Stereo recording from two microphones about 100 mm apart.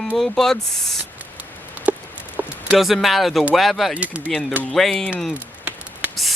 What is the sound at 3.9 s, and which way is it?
Speech, 15° right (ahead or behind).